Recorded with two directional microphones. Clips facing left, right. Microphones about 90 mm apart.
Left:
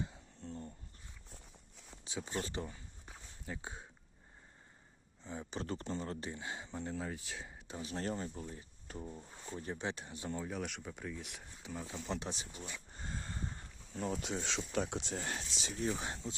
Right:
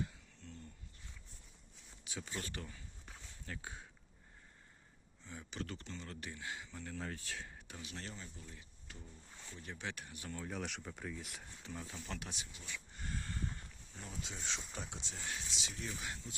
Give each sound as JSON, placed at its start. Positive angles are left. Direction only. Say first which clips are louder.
{"t": 0.0, "sound": "a sound", "louder": "left 1 dB", "side_deg": 25}
{"t": 0.5, "sound": "a sound", "louder": "left 9 dB", "side_deg": 35}
{"t": 2.0, "sound": "a sound", "louder": "left 5 dB", "side_deg": 20}
{"t": 3.4, "sound": "speech", "louder": "left 3 dB", "side_deg": 20}
{"t": 5.2, "sound": "speech", "louder": "left 4 dB", "side_deg": 30}
{"t": 7.0, "sound": "speech", "louder": "left 2 dB", "side_deg": 15}
{"t": 7.8, "sound": "speech", "louder": "left 10 dB", "side_deg": 35}
{"t": 9.0, "sound": "speech", "louder": "left 13 dB", "side_deg": 60}
{"t": 9.4, "sound": "speech", "louder": "left 6 dB", "side_deg": 35}
{"t": 10.4, "sound": "speech", "louder": "left 2 dB", "side_deg": 0}
{"t": 11.9, "sound": "a sound", "louder": "left 6 dB", "side_deg": 25}
{"t": 14.0, "sound": "speech", "louder": "left 10 dB", "side_deg": 60}